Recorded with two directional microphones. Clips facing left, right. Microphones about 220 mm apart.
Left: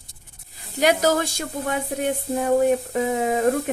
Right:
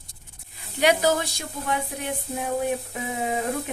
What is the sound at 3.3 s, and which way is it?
Speech, 45° left (ahead or behind).